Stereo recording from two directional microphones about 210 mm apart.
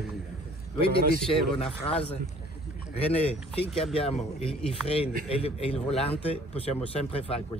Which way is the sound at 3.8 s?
30° left (ahead or behind).